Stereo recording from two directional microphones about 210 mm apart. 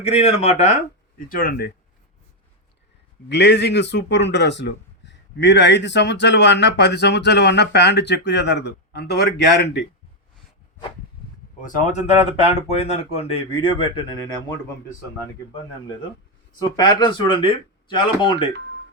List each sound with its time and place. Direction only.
0.0 s speech: 30° left (ahead or behind)
1.3 s speech: 45° left (ahead or behind)
3.2 s speech: 55° left (ahead or behind)
11.6 s speech: 35° left (ahead or behind); by 14.6 s 20° left (ahead or behind)
16.6 s speech: 20° left (ahead or behind)